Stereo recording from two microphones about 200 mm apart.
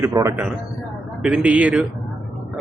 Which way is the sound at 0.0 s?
15° right (ahead or behind).